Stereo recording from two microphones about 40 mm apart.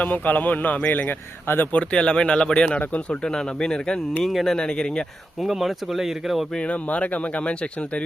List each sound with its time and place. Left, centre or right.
0.0 s speech: left
1.7 s speech: left
2.8 s speech: left
3.2 s speech: centre
4.2 s speech: centre
4.5 s speech: left
5.4 s speech: centre
6.6 s speech: left